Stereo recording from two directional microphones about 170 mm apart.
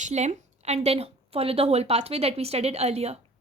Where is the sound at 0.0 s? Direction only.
45° right (ahead or behind).